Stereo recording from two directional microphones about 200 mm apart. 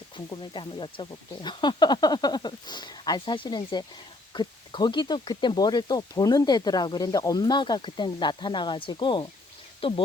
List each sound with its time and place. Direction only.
0.3 s speech: 25° left (ahead or behind)